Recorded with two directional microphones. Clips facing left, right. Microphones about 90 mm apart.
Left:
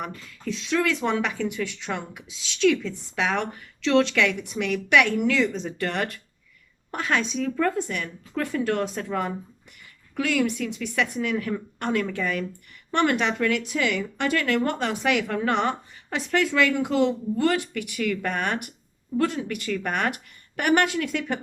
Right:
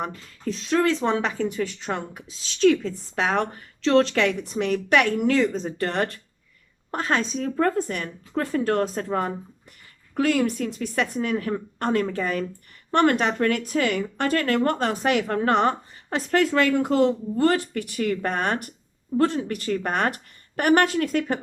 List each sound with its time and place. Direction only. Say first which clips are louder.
0.0 s speech: right 3 dB; 40° right (ahead or behind)